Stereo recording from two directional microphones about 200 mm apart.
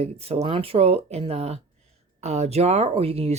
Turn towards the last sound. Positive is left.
turn(degrees=-30)  # may be behind; listen again after turning